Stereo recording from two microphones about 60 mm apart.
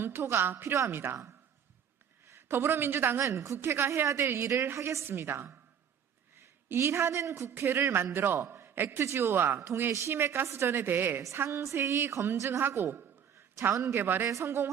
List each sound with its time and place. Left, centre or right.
0.0 s a woman's voice: right
2.3 s a woman's voice: right
3.2 s a woman's voice: right
6.7 s a woman's voice: right
10.7 s a woman's voice: right
11.3 s a woman's voice: right
14.3 s speech: right